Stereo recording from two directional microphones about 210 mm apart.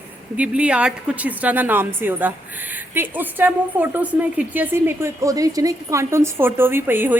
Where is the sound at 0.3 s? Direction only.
5° right (ahead or behind).